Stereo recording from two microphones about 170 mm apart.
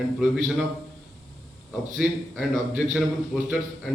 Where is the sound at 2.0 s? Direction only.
Centre (ahead or behind).